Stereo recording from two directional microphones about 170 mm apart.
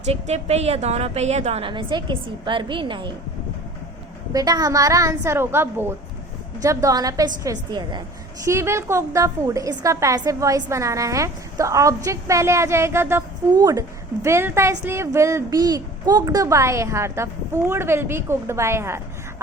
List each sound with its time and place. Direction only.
0.1 s a woman's voice: 40° right (ahead or behind)
4.3 s a woman's voice: 20° right (ahead or behind)